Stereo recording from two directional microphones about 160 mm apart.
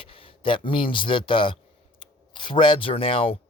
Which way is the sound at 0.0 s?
35° left (ahead or behind).